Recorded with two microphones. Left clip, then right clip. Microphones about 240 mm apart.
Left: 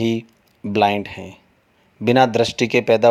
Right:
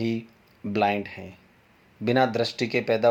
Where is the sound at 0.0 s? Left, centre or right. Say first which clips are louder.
Left 8 dB; left.